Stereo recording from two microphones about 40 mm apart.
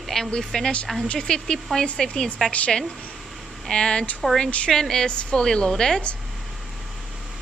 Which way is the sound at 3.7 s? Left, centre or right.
Left.